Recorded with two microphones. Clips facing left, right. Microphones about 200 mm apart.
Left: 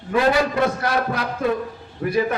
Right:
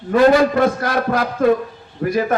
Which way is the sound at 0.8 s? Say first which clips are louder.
Right 4 dB; 55° right (ahead or behind).